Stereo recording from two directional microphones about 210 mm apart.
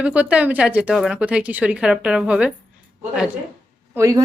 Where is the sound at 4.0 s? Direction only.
15° right (ahead or behind).